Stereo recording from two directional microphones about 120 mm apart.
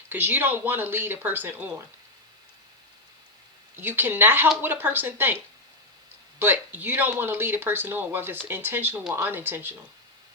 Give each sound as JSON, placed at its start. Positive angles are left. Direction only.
{"t": 0.1, "sound": "speech", "side_deg": -15}
{"t": 3.8, "sound": "speech", "side_deg": -15}
{"t": 6.4, "sound": "speech", "side_deg": -15}